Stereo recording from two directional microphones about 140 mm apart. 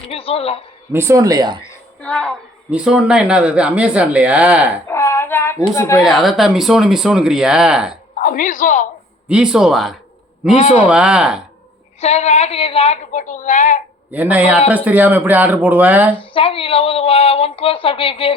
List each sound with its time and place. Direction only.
0.1 s a sound: 45° left (ahead or behind)
0.9 s speech: 20° right (ahead or behind)
2.0 s a woman's voice: 10° left (ahead or behind)
2.6 s speech: 5° right (ahead or behind)
4.9 s a sound: 20° left (ahead or behind)
6.1 s speech: centre (ahead or behind)
8.2 s speech: 70° left (ahead or behind)
9.3 s speech: 5° right (ahead or behind)
10.5 s a man's voice: 50° left (ahead or behind)
10.8 s speech: 5° right (ahead or behind)
11.9 s a woman's voice: 50° left (ahead or behind)
14.1 s speech: 10° right (ahead or behind)
16.3 s speech: 40° left (ahead or behind)